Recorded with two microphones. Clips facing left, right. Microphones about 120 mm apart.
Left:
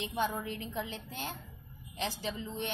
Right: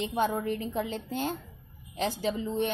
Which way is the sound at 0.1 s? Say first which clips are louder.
Right 5 dB; 40° right (ahead or behind).